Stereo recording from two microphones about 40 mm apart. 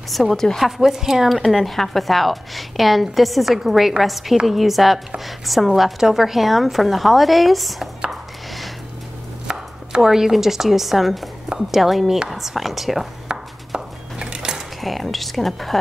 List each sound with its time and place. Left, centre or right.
0.3 s a woman's voice: centre
0.6 s a woman's voice: centre
9.5 s chopping: centre
11.5 s a woman's voice: centre
13.7 s a sound: centre
14.8 s a woman's voice: centre